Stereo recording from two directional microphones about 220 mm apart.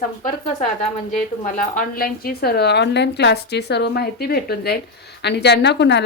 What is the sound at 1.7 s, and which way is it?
A woman's voice, 40° left (ahead or behind).